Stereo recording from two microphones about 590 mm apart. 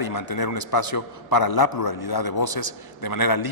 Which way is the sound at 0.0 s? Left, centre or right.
Left.